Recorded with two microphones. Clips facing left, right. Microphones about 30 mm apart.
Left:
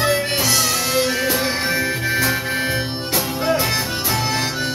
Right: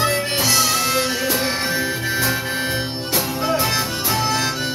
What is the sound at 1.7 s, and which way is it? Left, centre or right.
Music, left.